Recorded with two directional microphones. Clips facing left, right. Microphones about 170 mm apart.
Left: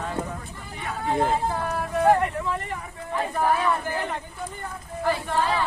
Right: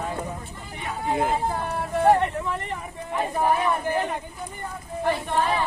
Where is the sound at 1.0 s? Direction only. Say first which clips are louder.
Left 1 dB; 10° right (ahead or behind).